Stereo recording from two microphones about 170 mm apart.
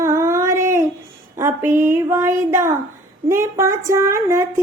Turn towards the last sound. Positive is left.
turn(degrees=-15)  # may be behind; listen again after turning